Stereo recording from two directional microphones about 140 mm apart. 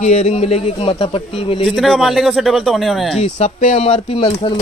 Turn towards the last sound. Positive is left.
turn(degrees=40)  # may be behind; listen again after turning